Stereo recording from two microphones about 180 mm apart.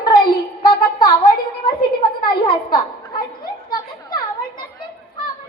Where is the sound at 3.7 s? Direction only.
25° left (ahead or behind).